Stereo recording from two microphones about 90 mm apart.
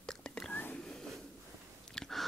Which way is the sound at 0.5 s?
20° left (ahead or behind).